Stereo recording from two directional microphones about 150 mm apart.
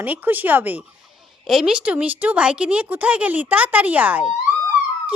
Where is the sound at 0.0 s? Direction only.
10° right (ahead or behind).